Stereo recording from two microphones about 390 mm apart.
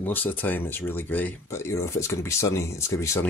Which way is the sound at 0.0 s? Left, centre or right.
Centre.